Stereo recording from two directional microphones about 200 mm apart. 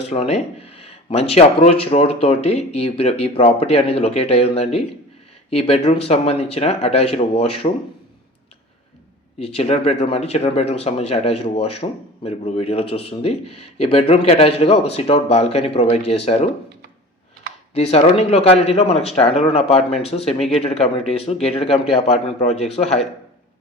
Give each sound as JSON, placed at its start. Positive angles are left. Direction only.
{"t": 0.0, "sound": "speech", "side_deg": 30}
{"t": 9.4, "sound": "speech", "side_deg": 30}
{"t": 17.7, "sound": "speech", "side_deg": 30}